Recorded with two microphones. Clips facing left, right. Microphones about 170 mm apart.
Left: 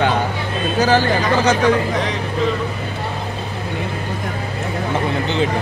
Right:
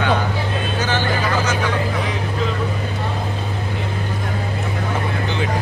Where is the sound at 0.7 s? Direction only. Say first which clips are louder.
Left 8 dB; 35° left (ahead or behind).